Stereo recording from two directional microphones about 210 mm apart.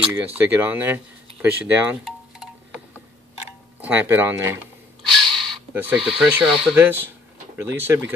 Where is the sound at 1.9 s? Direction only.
5° right (ahead or behind).